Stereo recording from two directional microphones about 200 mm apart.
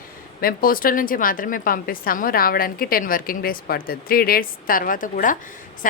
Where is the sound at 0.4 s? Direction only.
45° left (ahead or behind).